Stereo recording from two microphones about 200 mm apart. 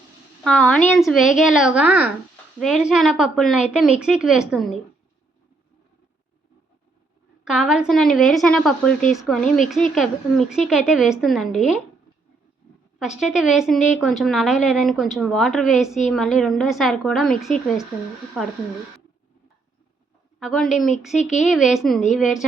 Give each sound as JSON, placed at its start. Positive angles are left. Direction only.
{"t": 0.4, "sound": "a woman's voice", "side_deg": 5}
{"t": 7.4, "sound": "a woman's voice", "side_deg": -5}
{"t": 13.0, "sound": "a woman's voice", "side_deg": -5}
{"t": 20.4, "sound": "a woman's voice", "side_deg": 0}
{"t": 21.2, "sound": "speech", "side_deg": 35}
{"t": 21.5, "sound": "a woman's voice", "side_deg": 0}